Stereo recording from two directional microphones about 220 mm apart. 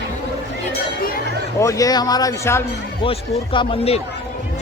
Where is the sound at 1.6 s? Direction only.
15° left (ahead or behind).